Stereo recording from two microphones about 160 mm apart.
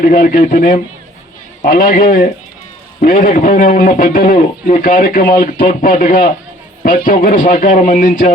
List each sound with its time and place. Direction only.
0.0 s a man's voice: 60° left (ahead or behind)